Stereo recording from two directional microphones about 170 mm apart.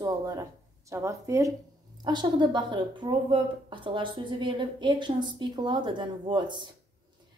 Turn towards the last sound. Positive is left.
turn(degrees=-25)  # may be behind; listen again after turning